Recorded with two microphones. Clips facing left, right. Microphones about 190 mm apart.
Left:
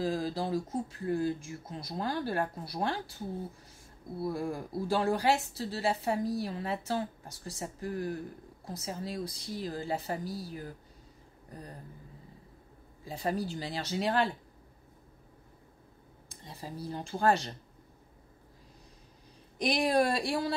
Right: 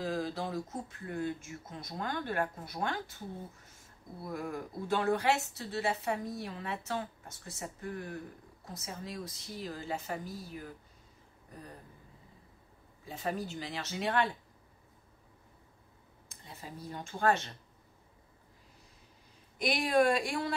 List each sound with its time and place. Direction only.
0.0 s speech: 35° left (ahead or behind)
4.2 s speech: 30° left (ahead or behind)
13.0 s speech: 35° left (ahead or behind)
16.4 s speech: 35° left (ahead or behind)
19.6 s speech: 35° left (ahead or behind)